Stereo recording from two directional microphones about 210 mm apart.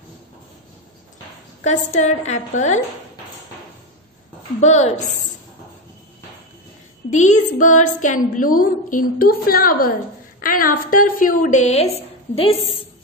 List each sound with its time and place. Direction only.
1.6 s a woman's voice: 35° left (ahead or behind)
4.6 s a woman's voice: 35° left (ahead or behind)
7.1 s a woman's voice: 35° left (ahead or behind)